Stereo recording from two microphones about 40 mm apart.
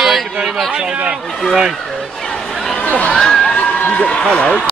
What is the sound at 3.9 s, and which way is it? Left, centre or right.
Speech, left.